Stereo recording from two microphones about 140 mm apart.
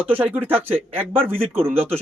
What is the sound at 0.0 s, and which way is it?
Speech, 10° right (ahead or behind).